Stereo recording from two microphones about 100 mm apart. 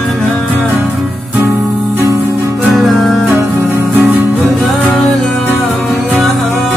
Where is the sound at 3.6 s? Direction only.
20° right (ahead or behind).